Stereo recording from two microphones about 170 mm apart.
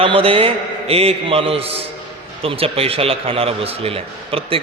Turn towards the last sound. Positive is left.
turn(degrees=-35)  # may be behind; listen again after turning